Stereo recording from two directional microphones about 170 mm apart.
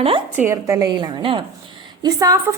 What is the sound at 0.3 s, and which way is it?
A woman's voice, 15° right (ahead or behind).